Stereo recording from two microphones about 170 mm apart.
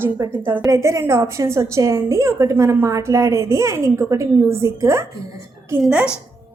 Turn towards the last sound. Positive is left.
turn(degrees=-5)  # may be behind; listen again after turning